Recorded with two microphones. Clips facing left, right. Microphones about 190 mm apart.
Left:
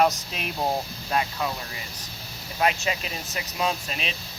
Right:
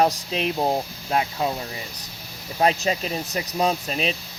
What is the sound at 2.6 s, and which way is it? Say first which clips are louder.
Speech: right 4 dB; 35° right (ahead or behind).